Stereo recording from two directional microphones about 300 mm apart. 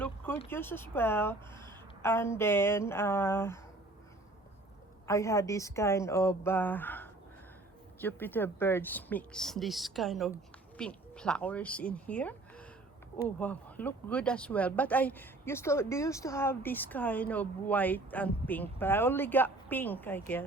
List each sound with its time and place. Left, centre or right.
0.4 s a woman's voice: centre
5.0 s a woman's voice: centre